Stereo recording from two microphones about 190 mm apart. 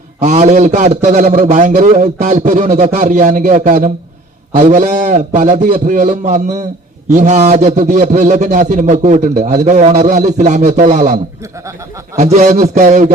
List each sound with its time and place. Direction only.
0.2 s a man's voice: 40° right (ahead or behind)